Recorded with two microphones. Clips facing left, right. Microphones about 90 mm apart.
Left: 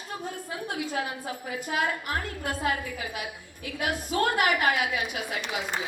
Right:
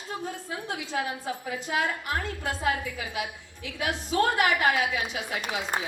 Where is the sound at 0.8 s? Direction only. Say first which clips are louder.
Left 1 dB; 50° left (ahead or behind).